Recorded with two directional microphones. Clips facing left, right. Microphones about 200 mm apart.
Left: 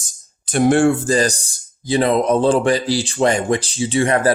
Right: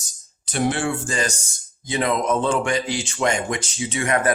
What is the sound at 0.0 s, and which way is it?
Speech, 50° left (ahead or behind).